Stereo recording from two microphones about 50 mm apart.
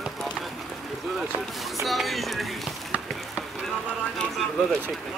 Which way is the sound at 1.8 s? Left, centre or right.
Centre.